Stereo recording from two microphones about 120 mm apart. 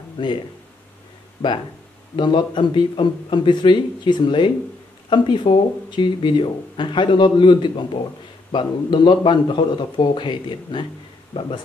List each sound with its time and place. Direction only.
0.2 s speech: 40° left (ahead or behind)
2.1 s speech: 40° left (ahead or behind)